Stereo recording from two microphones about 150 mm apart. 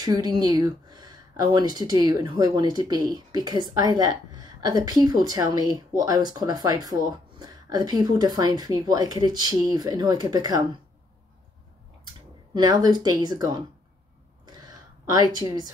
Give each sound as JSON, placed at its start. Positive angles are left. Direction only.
{"t": 0.0, "sound": "speech", "side_deg": -25}
{"t": 12.5, "sound": "speech", "side_deg": -25}
{"t": 14.4, "sound": "a sound", "side_deg": -25}